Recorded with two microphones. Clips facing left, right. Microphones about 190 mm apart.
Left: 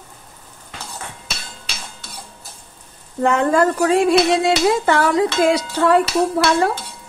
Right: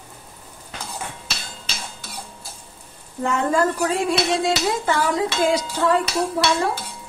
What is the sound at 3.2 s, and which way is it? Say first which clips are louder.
Speech: left 5 dB; 65° left (ahead or behind).